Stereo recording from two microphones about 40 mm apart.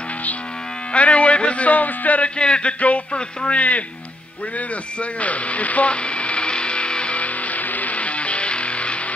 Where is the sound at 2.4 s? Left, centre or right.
Left.